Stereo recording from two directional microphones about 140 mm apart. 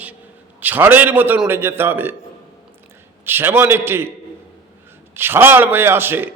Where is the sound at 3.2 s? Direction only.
15° right (ahead or behind).